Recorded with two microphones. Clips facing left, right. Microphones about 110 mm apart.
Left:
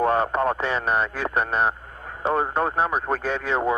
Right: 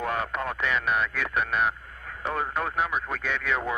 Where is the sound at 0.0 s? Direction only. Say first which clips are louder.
Left 8 dB; 35° left (ahead or behind).